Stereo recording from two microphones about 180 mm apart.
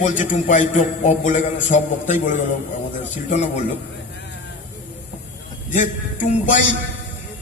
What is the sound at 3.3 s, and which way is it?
Speech, 40° left (ahead or behind).